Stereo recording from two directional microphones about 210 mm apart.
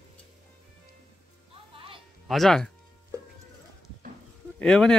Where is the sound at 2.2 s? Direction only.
Centre (ahead or behind).